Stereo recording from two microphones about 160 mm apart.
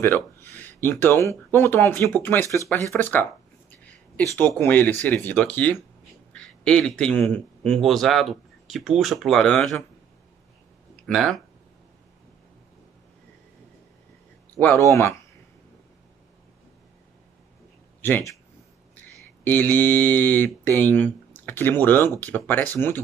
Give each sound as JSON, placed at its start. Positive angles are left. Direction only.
{"t": 0.0, "sound": "speech", "side_deg": 15}
{"t": 4.4, "sound": "speech", "side_deg": 15}
{"t": 11.1, "sound": "speech", "side_deg": 0}
{"t": 14.6, "sound": "speech", "side_deg": 15}
{"t": 18.0, "sound": "speech", "side_deg": 15}
{"t": 19.4, "sound": "speech", "side_deg": 10}